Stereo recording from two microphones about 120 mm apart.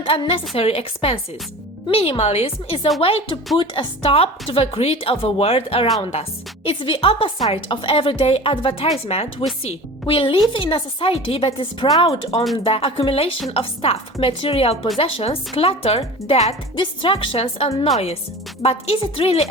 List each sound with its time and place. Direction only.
0.0 s a woman's voice: 50° left (ahead or behind)
9.6 s a woman's voice: 50° left (ahead or behind)
16.7 s a woman's voice: 45° left (ahead or behind)